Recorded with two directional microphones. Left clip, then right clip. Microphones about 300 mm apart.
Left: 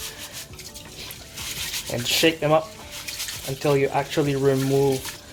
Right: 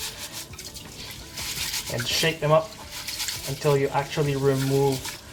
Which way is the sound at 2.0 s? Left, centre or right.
Left.